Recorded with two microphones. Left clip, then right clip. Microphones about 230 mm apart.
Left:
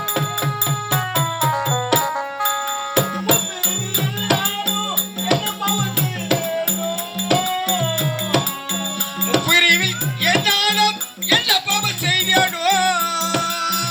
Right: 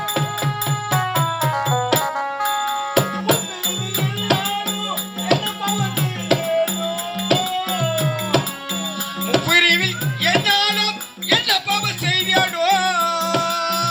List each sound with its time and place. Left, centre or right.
0.9 s music: centre
6.8 s music: centre